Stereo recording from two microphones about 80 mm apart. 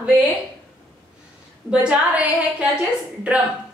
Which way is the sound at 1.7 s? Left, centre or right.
Centre.